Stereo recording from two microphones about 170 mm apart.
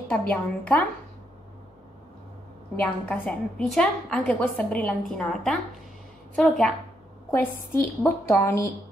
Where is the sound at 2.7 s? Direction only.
10° left (ahead or behind).